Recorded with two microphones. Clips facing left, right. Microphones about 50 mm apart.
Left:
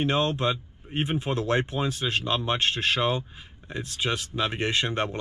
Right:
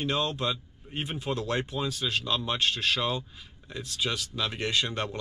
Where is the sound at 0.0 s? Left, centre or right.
Left.